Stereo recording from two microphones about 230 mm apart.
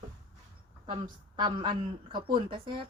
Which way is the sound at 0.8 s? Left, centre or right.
Centre.